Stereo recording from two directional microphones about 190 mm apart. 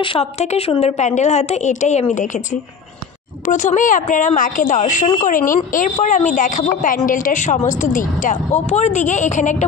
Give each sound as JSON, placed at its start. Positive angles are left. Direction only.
{"t": 0.0, "sound": "a woman's voice", "side_deg": 30}
{"t": 3.4, "sound": "a woman's voice", "side_deg": 40}